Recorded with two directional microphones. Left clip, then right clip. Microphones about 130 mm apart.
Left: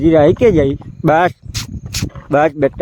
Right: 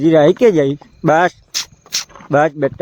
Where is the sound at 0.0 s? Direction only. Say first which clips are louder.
Even; 5° left (ahead or behind).